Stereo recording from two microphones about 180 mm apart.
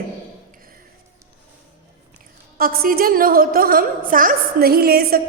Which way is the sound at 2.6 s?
55° right (ahead or behind).